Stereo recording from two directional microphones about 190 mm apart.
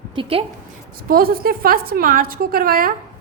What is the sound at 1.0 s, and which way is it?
A woman's voice, 50° right (ahead or behind).